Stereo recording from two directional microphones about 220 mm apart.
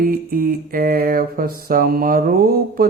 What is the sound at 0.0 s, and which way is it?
Speech, 40° right (ahead or behind).